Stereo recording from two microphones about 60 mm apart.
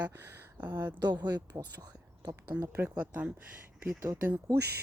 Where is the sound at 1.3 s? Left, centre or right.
Right.